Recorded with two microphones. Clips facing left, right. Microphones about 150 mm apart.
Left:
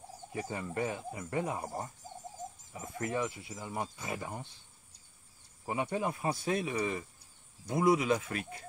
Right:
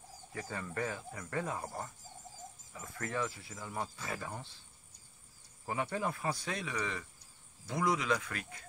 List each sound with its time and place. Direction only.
0.3 s speech: 20° left (ahead or behind)
5.7 s speech: 20° left (ahead or behind)